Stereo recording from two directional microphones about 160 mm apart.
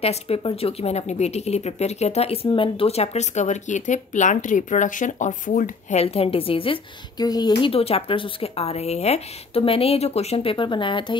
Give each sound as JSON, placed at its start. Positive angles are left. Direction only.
{"t": 0.0, "sound": "speech", "side_deg": 40}